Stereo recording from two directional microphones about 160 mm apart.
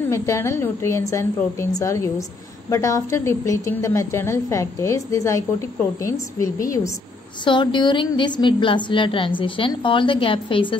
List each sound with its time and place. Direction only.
0.1 s a woman's voice: 15° left (ahead or behind)
7.4 s a woman's voice: 30° left (ahead or behind)